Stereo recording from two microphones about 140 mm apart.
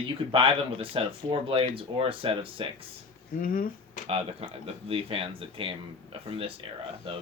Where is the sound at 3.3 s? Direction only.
85° left.